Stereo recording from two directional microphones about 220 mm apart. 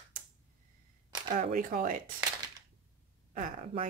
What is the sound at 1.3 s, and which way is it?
Speech, 35° right (ahead or behind).